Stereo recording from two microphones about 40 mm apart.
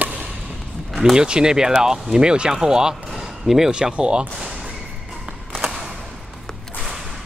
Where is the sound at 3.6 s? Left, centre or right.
Right.